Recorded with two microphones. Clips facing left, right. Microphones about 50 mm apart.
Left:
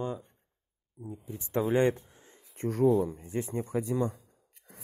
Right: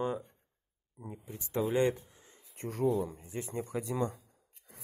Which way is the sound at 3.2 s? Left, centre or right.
Left.